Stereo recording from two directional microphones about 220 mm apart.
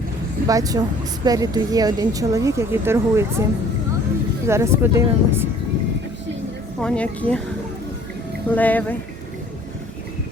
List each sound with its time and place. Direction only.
0.4 s speech: 15° right (ahead or behind)
4.4 s speech: 10° right (ahead or behind)
6.8 s speech: 5° left (ahead or behind)
8.5 s speech: 5° left (ahead or behind)